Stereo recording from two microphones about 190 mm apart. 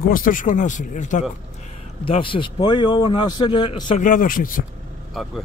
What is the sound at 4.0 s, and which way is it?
Speech, 45° left (ahead or behind).